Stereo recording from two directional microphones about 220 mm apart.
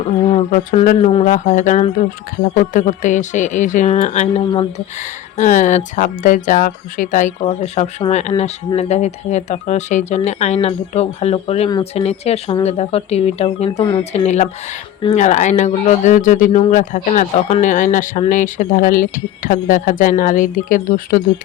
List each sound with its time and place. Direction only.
0.3 s speech: 30° left (ahead or behind)